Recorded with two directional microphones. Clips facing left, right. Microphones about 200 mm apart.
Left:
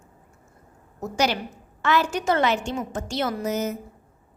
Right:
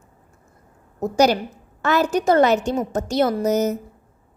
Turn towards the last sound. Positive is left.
turn(degrees=-40)  # may be behind; listen again after turning